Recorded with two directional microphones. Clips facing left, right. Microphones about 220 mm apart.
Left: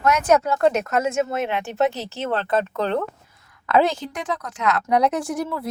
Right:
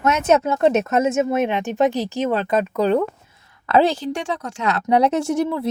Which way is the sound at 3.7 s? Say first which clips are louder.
Right 2 dB; 30° right (ahead or behind).